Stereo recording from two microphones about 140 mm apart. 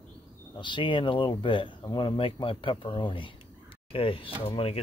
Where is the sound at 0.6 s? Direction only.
35° left (ahead or behind).